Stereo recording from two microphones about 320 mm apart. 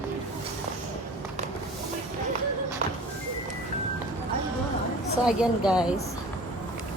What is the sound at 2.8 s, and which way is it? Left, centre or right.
Music, right.